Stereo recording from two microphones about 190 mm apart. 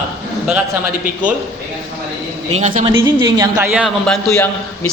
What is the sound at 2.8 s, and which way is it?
Speech, 20° right (ahead or behind).